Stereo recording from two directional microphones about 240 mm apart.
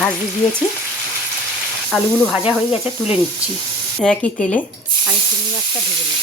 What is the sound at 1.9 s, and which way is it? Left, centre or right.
Speech, centre.